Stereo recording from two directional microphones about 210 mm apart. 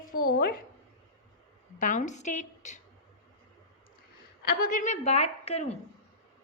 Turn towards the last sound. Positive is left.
turn(degrees=30)  # may be behind; listen again after turning